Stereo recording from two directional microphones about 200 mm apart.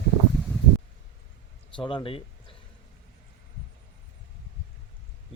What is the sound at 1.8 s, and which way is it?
Speech, 25° left (ahead or behind).